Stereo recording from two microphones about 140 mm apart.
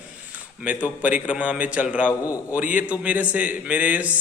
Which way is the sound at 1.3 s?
10° right (ahead or behind).